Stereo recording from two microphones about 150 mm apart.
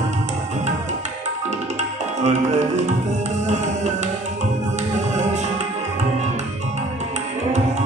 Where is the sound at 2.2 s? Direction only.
50° right (ahead or behind).